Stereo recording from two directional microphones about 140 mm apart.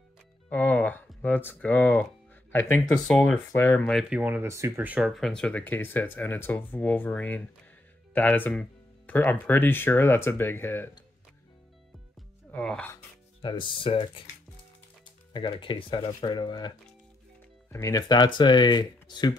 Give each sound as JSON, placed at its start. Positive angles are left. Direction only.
{"t": 0.5, "sound": "speech", "side_deg": 10}
{"t": 4.2, "sound": "speech", "side_deg": -15}
{"t": 12.4, "sound": "speech", "side_deg": 5}
{"t": 13.4, "sound": "speech", "side_deg": 35}
{"t": 15.3, "sound": "speech", "side_deg": 35}
{"t": 17.6, "sound": "speech", "side_deg": 20}